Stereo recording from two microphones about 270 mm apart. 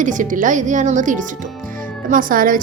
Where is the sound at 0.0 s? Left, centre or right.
Right.